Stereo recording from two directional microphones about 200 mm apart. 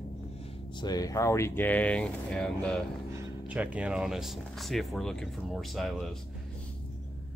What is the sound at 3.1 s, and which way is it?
Speech, 10° right (ahead or behind).